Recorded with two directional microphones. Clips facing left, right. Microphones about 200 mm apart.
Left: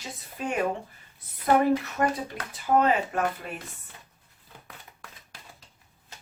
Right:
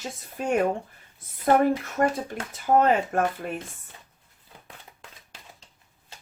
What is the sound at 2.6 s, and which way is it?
Speech, 45° right (ahead or behind).